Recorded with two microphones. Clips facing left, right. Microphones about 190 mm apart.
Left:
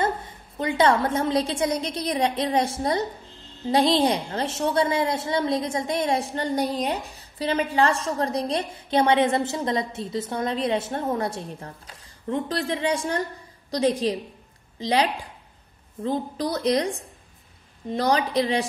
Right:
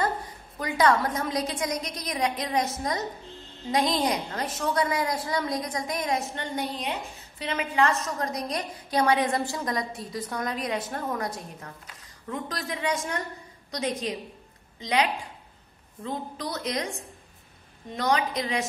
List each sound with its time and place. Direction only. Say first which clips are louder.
0.0 s a woman's voice: left 3 dB; 25° left (ahead or behind)